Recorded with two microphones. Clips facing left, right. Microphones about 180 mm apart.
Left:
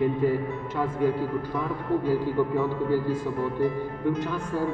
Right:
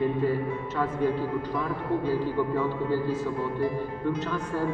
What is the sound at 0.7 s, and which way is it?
Speech, 10° left (ahead or behind).